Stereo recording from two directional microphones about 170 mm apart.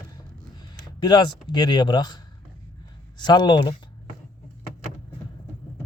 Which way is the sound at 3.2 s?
25° left (ahead or behind).